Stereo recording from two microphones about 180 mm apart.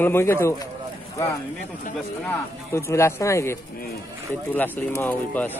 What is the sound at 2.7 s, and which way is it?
Speech, 15° left (ahead or behind).